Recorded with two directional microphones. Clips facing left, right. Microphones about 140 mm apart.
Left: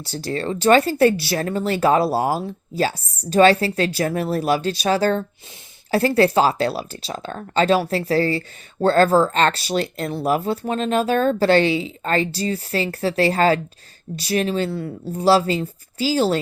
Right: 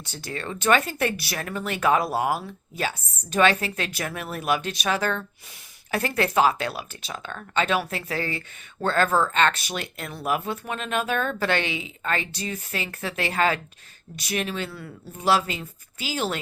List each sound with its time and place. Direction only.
0.0 s speech: 35° left (ahead or behind)